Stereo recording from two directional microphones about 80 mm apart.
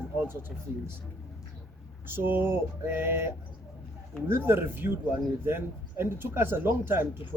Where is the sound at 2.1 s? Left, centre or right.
Right.